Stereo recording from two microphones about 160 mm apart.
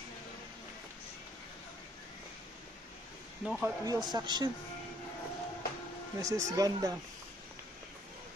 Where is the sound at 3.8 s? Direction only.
25° right (ahead or behind).